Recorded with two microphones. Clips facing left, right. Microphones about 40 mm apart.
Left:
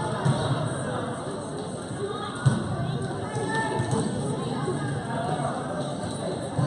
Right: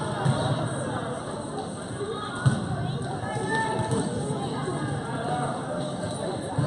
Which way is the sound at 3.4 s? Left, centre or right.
Centre.